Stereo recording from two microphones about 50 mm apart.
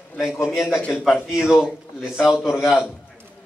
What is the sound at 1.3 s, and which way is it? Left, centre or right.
Speech, centre.